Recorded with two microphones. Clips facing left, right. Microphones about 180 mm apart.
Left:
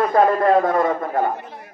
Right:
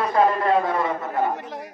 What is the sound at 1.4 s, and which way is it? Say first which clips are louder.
Chatter: right 4 dB; 90° right.